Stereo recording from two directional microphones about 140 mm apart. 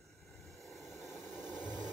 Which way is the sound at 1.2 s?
15° left (ahead or behind).